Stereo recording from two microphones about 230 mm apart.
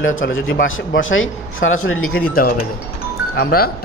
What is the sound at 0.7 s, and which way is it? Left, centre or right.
A man's voice, left.